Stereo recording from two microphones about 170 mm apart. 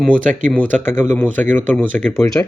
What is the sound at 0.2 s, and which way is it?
Speech, 50° right (ahead or behind).